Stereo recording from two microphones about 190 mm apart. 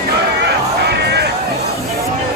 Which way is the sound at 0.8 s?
60° right (ahead or behind).